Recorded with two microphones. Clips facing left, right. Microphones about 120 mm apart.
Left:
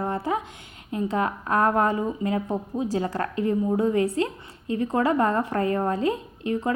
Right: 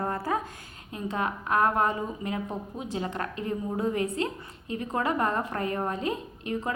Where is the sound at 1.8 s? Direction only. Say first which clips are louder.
Left 5 dB; 30° left (ahead or behind).